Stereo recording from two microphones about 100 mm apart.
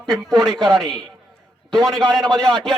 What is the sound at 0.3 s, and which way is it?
Speech, 40° right (ahead or behind).